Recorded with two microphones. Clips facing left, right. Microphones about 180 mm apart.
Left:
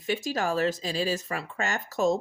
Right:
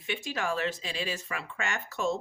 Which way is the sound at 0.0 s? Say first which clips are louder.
Left 5 dB; 40° left (ahead or behind).